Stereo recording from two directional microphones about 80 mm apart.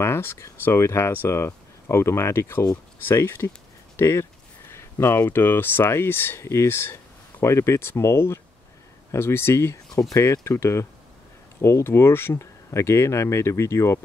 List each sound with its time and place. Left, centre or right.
0.0 s speech: left